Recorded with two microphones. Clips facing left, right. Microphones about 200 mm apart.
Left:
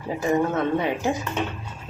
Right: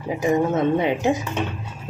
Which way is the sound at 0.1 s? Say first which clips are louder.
Right 2 dB; 15° right (ahead or behind).